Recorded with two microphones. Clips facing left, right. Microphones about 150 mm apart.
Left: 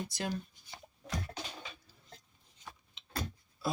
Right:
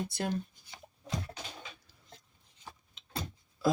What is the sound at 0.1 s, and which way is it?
Speech, 55° right (ahead or behind).